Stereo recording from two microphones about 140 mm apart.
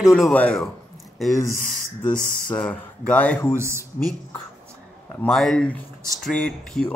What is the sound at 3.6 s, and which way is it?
Speech, 20° right (ahead or behind).